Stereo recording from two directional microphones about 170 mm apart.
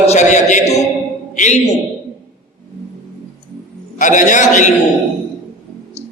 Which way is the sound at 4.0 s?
45° left (ahead or behind).